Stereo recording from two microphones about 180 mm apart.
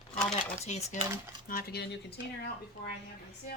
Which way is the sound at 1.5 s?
55° left (ahead or behind).